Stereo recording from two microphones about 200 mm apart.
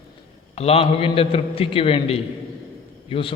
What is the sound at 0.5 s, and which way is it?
A man's voice, 30° left (ahead or behind).